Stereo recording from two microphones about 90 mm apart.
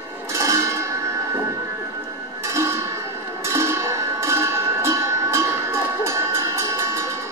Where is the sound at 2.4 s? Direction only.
30° right (ahead or behind).